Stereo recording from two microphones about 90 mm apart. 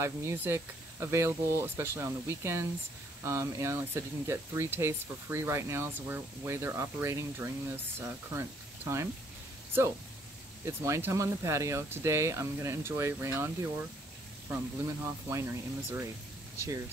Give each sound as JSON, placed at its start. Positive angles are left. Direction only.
{"t": 0.0, "sound": "speech", "side_deg": -30}
{"t": 10.6, "sound": "speech", "side_deg": -30}
{"t": 15.2, "sound": "speech", "side_deg": -30}